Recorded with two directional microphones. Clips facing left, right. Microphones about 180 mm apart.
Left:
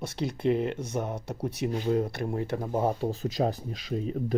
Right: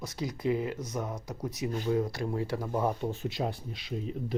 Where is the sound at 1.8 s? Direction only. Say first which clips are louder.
Left 1 dB; 60° left (ahead or behind).